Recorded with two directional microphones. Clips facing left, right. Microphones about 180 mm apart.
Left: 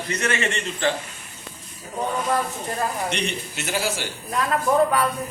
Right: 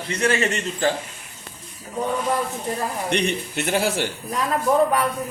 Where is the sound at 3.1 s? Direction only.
55° right (ahead or behind).